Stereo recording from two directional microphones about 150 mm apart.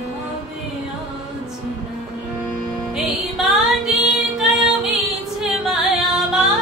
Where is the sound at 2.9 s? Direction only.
Centre (ahead or behind).